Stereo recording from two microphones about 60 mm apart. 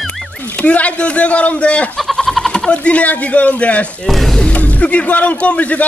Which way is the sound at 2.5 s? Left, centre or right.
Centre.